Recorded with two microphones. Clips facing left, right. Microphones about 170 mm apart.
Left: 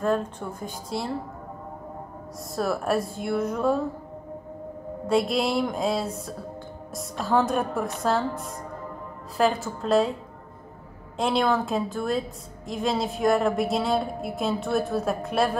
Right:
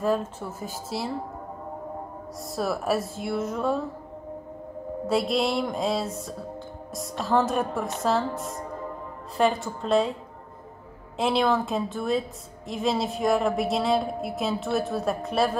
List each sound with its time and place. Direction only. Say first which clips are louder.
0.0 s a woman's voice: even; 5° right (ahead or behind)
2.5 s a woman's voice: left 1 dB; centre (ahead or behind)
5.0 s a woman's voice: left 1 dB; centre (ahead or behind)
11.1 s a woman's voice: even; centre (ahead or behind)